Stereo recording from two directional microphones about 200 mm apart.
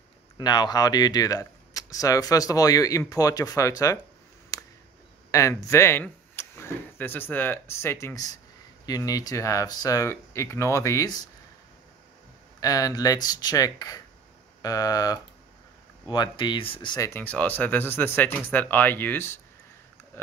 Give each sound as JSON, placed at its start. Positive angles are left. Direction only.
{"t": 0.4, "sound": "speech", "side_deg": 20}
{"t": 4.5, "sound": "a sound", "side_deg": 15}
{"t": 5.3, "sound": "speech", "side_deg": 15}
{"t": 12.5, "sound": "speech", "side_deg": 15}